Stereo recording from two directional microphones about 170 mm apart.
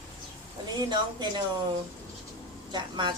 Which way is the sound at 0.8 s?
25° right (ahead or behind).